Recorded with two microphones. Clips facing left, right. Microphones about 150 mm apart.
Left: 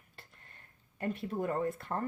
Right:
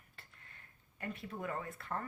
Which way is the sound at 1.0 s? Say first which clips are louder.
Left 8 dB; 35° left (ahead or behind).